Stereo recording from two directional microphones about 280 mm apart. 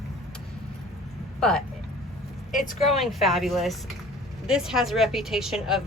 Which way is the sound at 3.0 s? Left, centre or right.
Centre.